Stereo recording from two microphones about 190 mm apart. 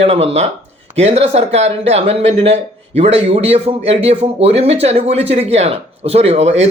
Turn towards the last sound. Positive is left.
turn(degrees=-35)  # may be behind; listen again after turning